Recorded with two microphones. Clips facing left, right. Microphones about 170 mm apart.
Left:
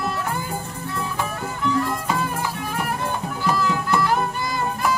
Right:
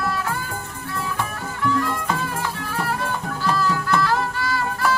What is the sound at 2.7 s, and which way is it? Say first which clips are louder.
Music: right 2 dB; 15° left (ahead or behind).